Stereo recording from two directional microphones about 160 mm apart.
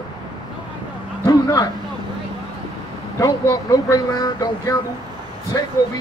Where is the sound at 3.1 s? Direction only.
25° left (ahead or behind).